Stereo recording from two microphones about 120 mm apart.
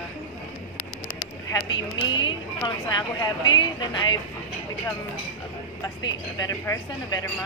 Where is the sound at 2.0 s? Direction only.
40° left (ahead or behind).